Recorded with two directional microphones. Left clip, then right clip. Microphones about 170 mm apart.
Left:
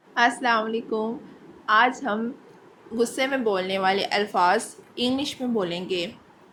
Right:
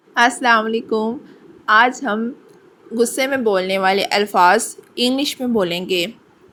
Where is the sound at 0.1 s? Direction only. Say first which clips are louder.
Right 7 dB; 45° right (ahead or behind).